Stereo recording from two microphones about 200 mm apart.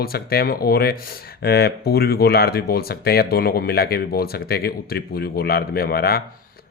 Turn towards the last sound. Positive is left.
turn(degrees=50)  # may be behind; listen again after turning